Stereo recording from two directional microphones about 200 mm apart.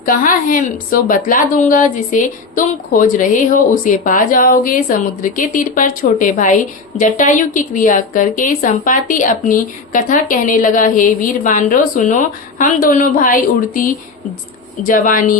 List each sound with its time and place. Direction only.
0.0 s a woman's voice: 45° left (ahead or behind)